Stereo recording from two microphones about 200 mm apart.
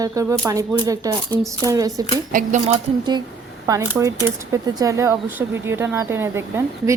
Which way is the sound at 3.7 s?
15° right (ahead or behind).